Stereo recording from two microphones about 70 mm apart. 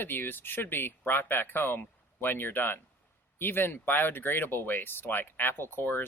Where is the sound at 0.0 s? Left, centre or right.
Left.